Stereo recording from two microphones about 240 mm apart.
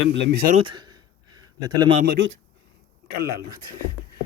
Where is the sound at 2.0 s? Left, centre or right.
Right.